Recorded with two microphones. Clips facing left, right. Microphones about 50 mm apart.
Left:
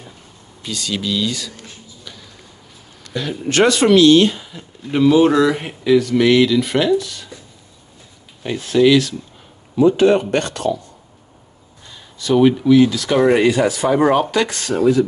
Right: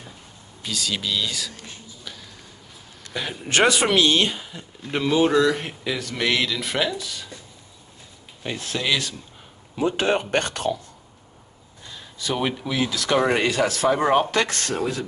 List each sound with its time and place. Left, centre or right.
0.6 s speech: centre
3.1 s speech: centre
8.4 s speech: centre
10.0 s speech: centre
12.2 s speech: centre